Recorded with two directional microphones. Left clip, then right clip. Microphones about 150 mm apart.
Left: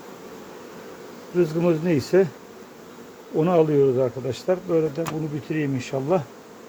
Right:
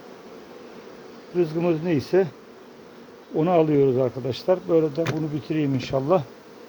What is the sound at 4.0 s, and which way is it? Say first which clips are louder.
Speech: even; 50° right (ahead or behind).